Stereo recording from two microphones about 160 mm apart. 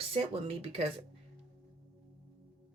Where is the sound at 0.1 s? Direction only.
35° right (ahead or behind).